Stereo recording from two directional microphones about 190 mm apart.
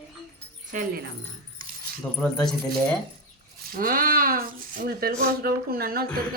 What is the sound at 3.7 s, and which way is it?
Speech, 45° right (ahead or behind).